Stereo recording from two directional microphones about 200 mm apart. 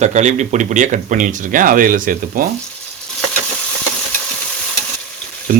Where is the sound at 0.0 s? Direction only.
35° right (ahead or behind).